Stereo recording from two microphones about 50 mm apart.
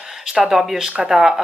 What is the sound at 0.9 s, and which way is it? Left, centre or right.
Speech, centre.